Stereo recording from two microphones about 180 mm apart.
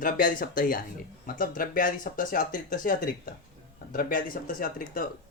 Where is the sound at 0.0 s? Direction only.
50° left (ahead or behind).